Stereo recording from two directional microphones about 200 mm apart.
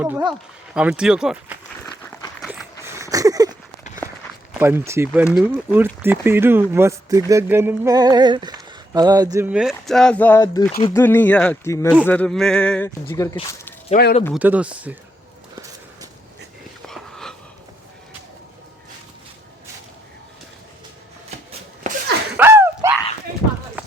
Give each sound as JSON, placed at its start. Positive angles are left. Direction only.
{"t": 0.0, "sound": "speech", "side_deg": -10}
{"t": 1.8, "sound": "applause", "side_deg": 10}
{"t": 2.4, "sound": "a sound", "side_deg": 0}
{"t": 2.8, "sound": "a sound", "side_deg": -15}
{"t": 4.5, "sound": "speech", "side_deg": -10}
{"t": 9.5, "sound": "speech", "side_deg": -5}
{"t": 10.4, "sound": "speech", "side_deg": 20}
{"t": 13.9, "sound": "speech", "side_deg": 50}
{"t": 14.3, "sound": "speech", "side_deg": -5}
{"t": 16.8, "sound": "a sound", "side_deg": 5}
{"t": 21.8, "sound": "a sound", "side_deg": -40}
{"t": 22.4, "sound": "dog", "side_deg": -10}